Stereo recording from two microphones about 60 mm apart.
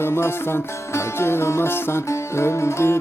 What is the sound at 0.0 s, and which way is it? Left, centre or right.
Music, left.